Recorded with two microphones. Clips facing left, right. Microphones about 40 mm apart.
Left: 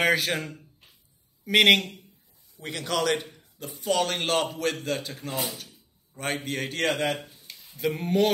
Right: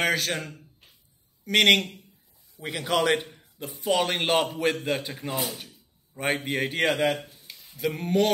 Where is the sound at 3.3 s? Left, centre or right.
Centre.